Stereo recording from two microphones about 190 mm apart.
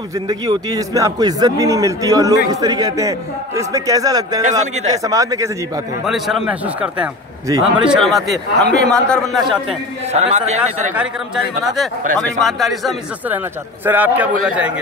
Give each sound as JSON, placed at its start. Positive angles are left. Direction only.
{"t": 0.1, "sound": "a man's voice", "side_deg": -20}
{"t": 4.4, "sound": "a man's voice", "side_deg": -40}
{"t": 5.0, "sound": "a man's voice", "side_deg": -20}
{"t": 6.0, "sound": "speech", "side_deg": 0}
{"t": 7.4, "sound": "a man's voice", "side_deg": -20}
{"t": 7.8, "sound": "speech", "side_deg": 0}
{"t": 10.1, "sound": "a man's voice", "side_deg": -35}
{"t": 11.6, "sound": "a man's voice", "side_deg": 0}